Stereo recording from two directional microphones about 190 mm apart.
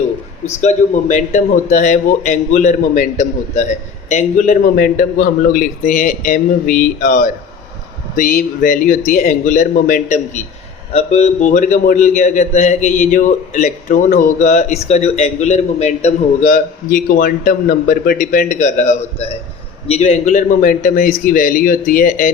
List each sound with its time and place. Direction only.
0.4 s a man's voice: 35° left (ahead or behind)